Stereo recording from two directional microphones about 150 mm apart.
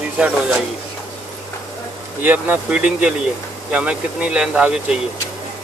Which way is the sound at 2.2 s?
15° right (ahead or behind).